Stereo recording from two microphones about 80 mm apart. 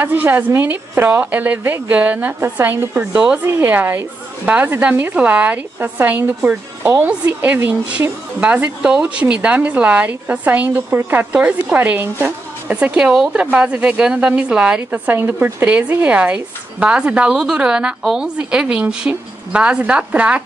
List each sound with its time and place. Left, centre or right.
0.0 s a woman's voice: right
12.7 s a woman's voice: centre
14.9 s a woman's voice: right